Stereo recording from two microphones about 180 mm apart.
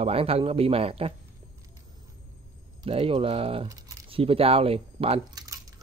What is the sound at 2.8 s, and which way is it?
Speech, 30° right (ahead or behind).